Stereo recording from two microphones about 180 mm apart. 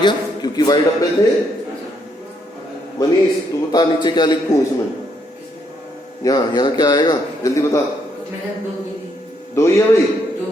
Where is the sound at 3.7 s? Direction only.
25° left (ahead or behind).